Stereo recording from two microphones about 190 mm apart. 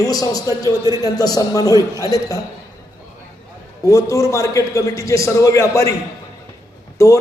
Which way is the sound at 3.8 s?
15° left (ahead or behind).